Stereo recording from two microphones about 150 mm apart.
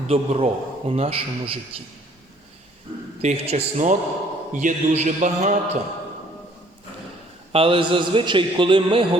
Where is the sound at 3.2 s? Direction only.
45° right (ahead or behind).